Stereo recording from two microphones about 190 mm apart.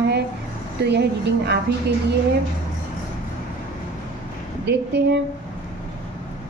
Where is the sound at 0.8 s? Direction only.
60° right (ahead or behind).